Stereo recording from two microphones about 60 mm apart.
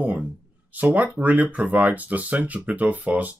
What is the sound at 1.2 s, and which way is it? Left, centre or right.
Speech, right.